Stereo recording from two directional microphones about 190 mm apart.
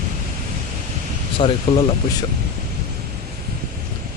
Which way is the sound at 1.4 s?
30° left (ahead or behind).